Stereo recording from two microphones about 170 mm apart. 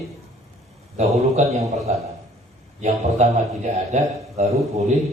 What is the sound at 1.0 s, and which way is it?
Speech, 40° right (ahead or behind).